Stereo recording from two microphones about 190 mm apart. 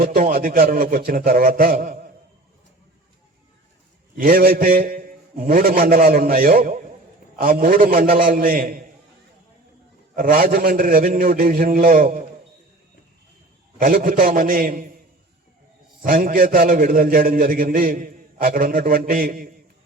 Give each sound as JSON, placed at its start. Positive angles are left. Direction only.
{"t": 0.0, "sound": "a man's voice", "side_deg": -45}
{"t": 4.1, "sound": "a man's voice", "side_deg": -50}
{"t": 10.2, "sound": "a man's voice", "side_deg": -45}
{"t": 13.7, "sound": "a man's voice", "side_deg": -45}
{"t": 16.0, "sound": "a man's voice", "side_deg": -45}